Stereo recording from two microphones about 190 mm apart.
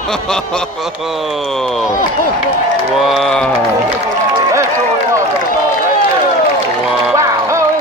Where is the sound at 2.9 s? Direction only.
Centre (ahead or behind).